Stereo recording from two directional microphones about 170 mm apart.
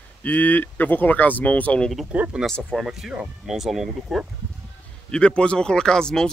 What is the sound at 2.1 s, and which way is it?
Speech, 10° right (ahead or behind).